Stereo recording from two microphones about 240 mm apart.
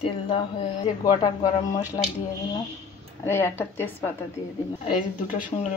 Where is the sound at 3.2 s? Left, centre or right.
Centre.